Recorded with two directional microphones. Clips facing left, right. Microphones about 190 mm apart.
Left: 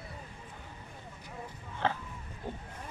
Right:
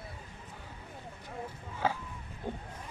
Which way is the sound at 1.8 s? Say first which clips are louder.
Even; 5° right (ahead or behind).